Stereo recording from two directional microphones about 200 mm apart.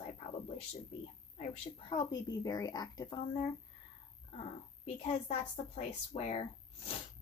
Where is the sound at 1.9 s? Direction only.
20° left (ahead or behind).